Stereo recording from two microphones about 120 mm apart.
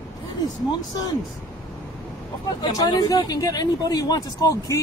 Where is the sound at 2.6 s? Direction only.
30° left (ahead or behind).